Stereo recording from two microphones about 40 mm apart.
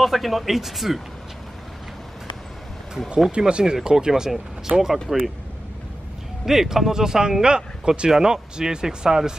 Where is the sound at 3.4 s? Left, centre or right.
Right.